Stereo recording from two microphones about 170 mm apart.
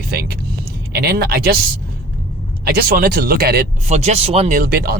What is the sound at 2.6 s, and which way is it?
Speech, 65° right (ahead or behind).